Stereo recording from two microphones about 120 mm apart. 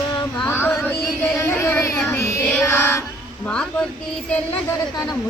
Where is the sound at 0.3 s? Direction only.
20° left (ahead or behind).